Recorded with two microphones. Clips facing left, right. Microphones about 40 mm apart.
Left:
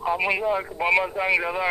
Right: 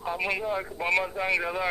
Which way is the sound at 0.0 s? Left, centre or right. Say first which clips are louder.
Left 6 dB; centre.